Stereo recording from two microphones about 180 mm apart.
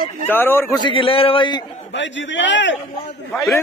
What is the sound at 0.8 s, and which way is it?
Speech, 30° left (ahead or behind).